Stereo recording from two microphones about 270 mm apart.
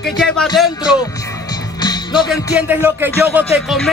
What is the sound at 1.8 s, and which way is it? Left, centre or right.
Music, centre.